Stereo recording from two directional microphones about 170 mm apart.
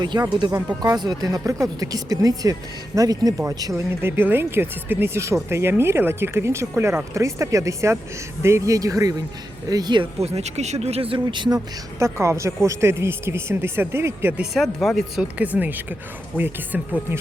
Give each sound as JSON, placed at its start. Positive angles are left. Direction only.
{"t": 0.0, "sound": "speech", "side_deg": -25}
{"t": 14.5, "sound": "speech", "side_deg": 0}